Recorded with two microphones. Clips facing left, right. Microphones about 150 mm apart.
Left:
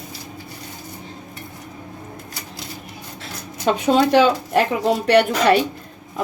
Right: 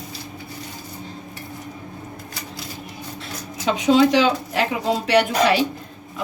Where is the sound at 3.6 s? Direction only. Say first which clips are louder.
Even; 55° left (ahead or behind).